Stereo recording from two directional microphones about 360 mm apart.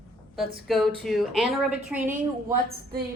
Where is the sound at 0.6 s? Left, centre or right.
Centre.